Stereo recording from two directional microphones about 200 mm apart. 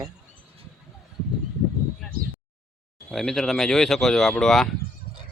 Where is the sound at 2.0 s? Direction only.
Centre (ahead or behind).